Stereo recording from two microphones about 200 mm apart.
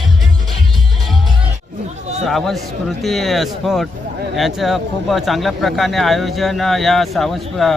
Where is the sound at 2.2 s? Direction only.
Centre (ahead or behind).